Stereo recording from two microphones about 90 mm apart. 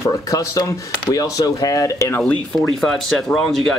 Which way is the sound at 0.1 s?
40° left (ahead or behind).